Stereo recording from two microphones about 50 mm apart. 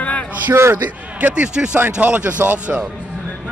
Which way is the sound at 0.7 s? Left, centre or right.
Right.